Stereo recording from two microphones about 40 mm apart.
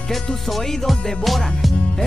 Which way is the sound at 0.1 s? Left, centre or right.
Centre.